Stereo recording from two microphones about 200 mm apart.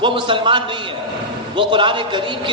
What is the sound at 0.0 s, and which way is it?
A man's voice, 25° right (ahead or behind).